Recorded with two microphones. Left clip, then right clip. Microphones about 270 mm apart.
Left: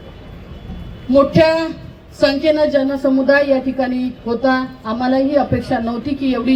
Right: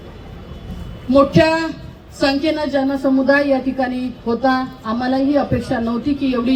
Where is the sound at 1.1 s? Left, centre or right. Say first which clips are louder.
Left 1 dB; left.